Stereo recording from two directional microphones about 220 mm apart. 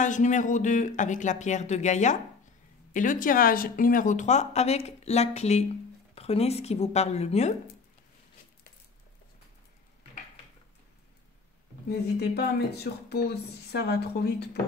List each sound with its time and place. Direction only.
0.0 s speech: 35° left (ahead or behind)
12.2 s speech: 45° left (ahead or behind)